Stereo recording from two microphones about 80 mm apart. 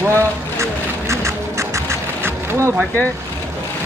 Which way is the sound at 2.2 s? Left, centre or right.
Right.